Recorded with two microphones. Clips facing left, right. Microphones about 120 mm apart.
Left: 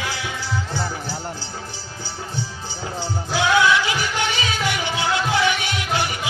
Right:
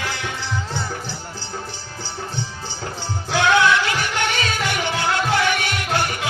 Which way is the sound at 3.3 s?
60° right (ahead or behind).